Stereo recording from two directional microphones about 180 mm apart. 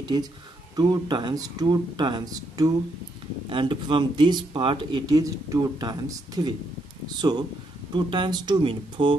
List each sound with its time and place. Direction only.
0.0 s speech: 25° right (ahead or behind)